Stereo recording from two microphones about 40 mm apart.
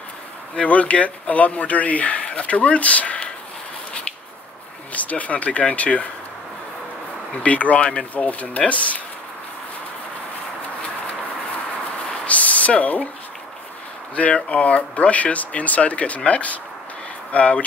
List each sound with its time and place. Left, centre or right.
0.6 s speech: left
4.9 s speech: left
7.4 s speech: left
8.1 s speech: left
12.3 s a sound: left
12.8 s speech: left
14.1 s speech: left